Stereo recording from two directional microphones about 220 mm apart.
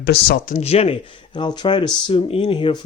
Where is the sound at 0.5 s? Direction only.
25° left (ahead or behind).